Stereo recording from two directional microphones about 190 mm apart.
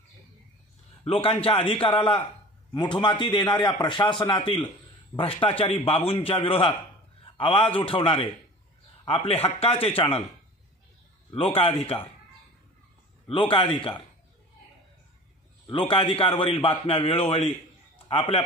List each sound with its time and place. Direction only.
1.0 s a man's voice: 30° left (ahead or behind)
11.2 s a man's voice: 30° left (ahead or behind)
13.3 s a man's voice: 25° left (ahead or behind)
15.6 s a man's voice: 25° left (ahead or behind)